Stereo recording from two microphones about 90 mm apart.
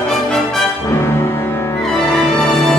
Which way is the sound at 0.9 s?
30° left (ahead or behind).